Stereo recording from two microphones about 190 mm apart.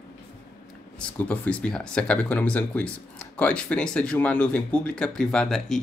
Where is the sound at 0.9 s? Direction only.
10° left (ahead or behind).